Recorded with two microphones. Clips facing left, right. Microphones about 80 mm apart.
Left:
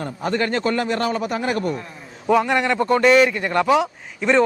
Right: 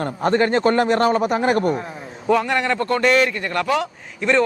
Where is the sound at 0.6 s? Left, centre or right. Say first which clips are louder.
Right 5 dB; right.